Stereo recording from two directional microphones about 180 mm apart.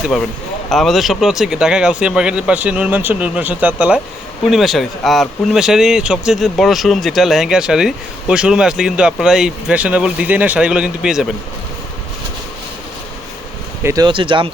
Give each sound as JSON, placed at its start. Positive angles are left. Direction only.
{"t": 0.1, "sound": "speech", "side_deg": 0}
{"t": 13.8, "sound": "speech", "side_deg": -20}